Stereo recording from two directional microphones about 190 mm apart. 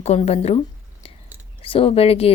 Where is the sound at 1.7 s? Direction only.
30° left (ahead or behind).